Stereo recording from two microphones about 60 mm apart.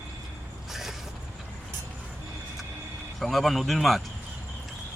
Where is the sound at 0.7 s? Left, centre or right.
Centre.